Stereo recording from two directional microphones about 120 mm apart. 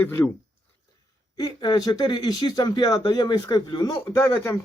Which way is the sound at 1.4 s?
35° left (ahead or behind).